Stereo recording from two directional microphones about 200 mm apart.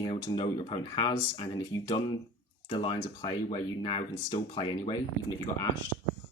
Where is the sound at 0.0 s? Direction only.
20° left (ahead or behind).